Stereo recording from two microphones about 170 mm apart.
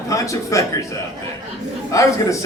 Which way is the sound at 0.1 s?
20° left (ahead or behind).